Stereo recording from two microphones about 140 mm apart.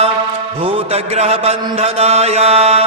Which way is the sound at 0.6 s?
45° right (ahead or behind).